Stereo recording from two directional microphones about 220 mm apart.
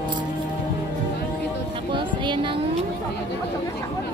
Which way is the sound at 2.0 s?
20° right (ahead or behind).